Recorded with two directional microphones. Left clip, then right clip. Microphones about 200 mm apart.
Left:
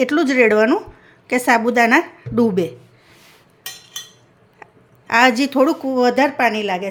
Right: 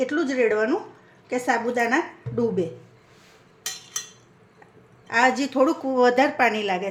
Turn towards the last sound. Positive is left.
turn(degrees=20)  # may be behind; listen again after turning